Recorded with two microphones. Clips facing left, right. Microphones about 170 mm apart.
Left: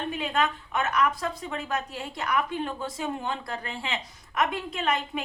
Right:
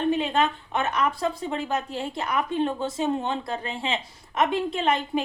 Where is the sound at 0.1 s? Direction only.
25° right (ahead or behind).